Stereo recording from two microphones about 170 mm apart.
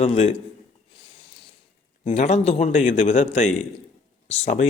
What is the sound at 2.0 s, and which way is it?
A man's voice, 40° left (ahead or behind).